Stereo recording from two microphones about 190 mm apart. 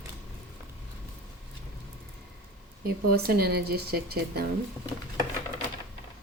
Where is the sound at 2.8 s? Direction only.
50° right (ahead or behind).